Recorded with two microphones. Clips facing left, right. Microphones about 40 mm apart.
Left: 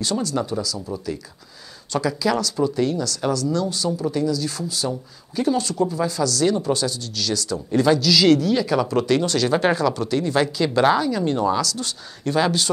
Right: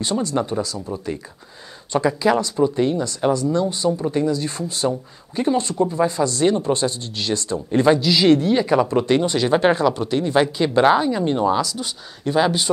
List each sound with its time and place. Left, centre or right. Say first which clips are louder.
0.0 s speech: right 2 dB; right
0.7 s speech: right 1 dB; centre
1.9 s speech: right 4 dB; right